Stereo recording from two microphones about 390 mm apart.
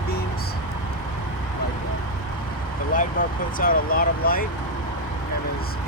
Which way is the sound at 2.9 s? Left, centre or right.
Left.